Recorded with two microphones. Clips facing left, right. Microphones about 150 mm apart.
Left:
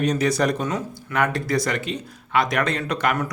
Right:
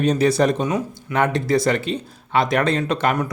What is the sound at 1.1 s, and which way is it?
Speech, 25° right (ahead or behind).